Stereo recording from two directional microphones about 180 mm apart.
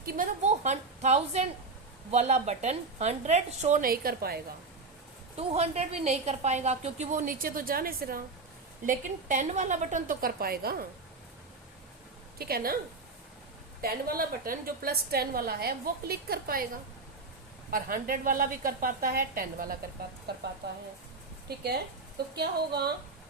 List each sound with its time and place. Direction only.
0.0 s a woman's voice: 45° right (ahead or behind)
5.4 s a woman's voice: 35° right (ahead or behind); by 8.2 s 55° right (ahead or behind)
8.9 s a woman's voice: 45° right (ahead or behind)
12.4 s a woman's voice: 55° right (ahead or behind)
13.8 s a woman's voice: 55° right (ahead or behind)
17.7 s a woman's voice: 50° right (ahead or behind)
21.5 s a woman's voice: 60° right (ahead or behind)